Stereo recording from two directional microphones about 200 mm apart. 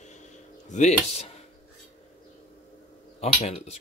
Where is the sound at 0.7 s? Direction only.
35° left (ahead or behind).